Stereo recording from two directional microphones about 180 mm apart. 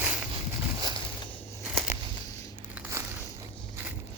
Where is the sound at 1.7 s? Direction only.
10° right (ahead or behind).